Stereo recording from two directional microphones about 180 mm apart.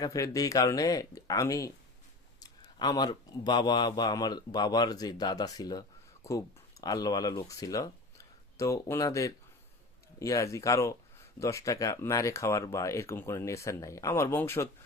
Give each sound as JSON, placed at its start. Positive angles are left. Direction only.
{"t": 0.0, "sound": "speech", "side_deg": 20}